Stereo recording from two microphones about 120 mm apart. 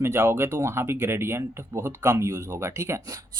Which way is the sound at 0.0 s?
20° right (ahead or behind).